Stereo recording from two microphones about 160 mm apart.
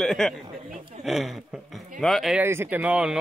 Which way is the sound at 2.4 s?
15° right (ahead or behind).